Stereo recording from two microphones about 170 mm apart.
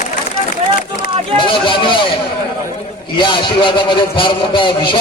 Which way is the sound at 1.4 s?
30° left (ahead or behind).